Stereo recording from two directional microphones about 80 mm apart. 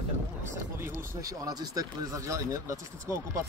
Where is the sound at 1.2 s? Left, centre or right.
Right.